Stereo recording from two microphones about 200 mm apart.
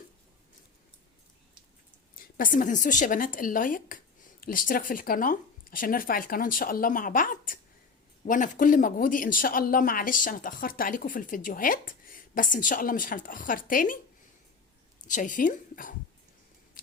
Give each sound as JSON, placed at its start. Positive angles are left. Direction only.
{"t": 2.1, "sound": "speech", "side_deg": 40}
{"t": 15.0, "sound": "a woman's voice", "side_deg": 40}
{"t": 16.8, "sound": "a sound", "side_deg": 45}